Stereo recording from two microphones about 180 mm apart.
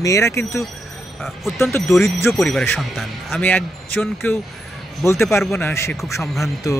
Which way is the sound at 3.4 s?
10° left (ahead or behind).